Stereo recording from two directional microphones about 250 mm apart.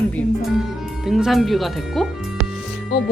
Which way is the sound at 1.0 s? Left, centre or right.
Centre.